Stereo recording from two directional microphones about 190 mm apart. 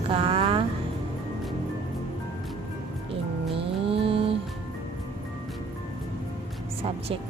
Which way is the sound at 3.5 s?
30° right (ahead or behind).